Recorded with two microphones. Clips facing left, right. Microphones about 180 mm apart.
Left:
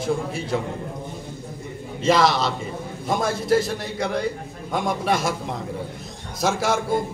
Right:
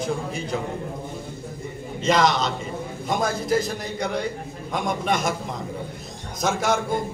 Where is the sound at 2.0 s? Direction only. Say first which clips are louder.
Left 2 dB; 5° left (ahead or behind).